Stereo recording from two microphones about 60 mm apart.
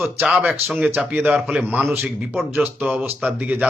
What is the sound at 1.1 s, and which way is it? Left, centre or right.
Speech, right.